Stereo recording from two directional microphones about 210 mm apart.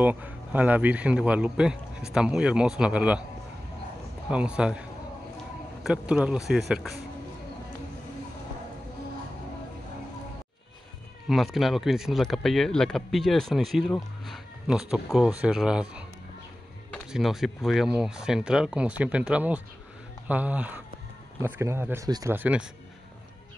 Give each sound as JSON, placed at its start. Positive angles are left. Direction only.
{"t": 0.0, "sound": "speech", "side_deg": -10}
{"t": 4.3, "sound": "speech", "side_deg": -5}
{"t": 5.9, "sound": "speech", "side_deg": -5}
{"t": 11.2, "sound": "speech", "side_deg": 0}